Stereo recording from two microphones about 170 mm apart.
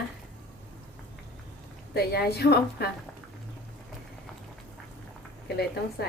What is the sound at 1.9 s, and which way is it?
Speech, 70° left (ahead or behind).